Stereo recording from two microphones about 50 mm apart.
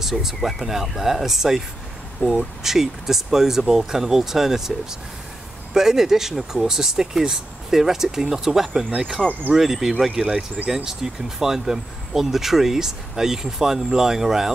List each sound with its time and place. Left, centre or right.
0.0 s speech: centre
9.2 s speech: centre
9.6 s speech: centre